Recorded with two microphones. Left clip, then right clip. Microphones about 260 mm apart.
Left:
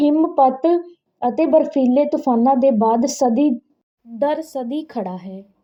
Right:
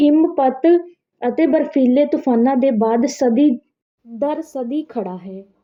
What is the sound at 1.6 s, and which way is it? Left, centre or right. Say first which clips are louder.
Speech: right 2 dB; left.